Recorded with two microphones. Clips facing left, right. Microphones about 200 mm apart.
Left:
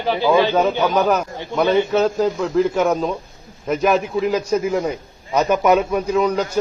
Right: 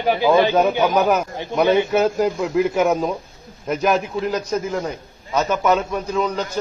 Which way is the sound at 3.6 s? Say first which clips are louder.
Left 2 dB; centre (ahead or behind).